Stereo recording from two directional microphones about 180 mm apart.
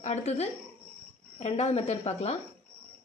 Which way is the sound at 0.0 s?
35° left (ahead or behind).